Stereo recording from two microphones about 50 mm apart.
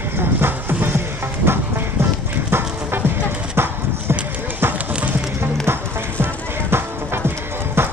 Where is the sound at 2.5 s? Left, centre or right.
Right.